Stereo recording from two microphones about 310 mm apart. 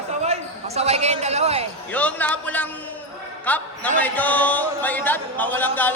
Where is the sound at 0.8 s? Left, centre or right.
Centre.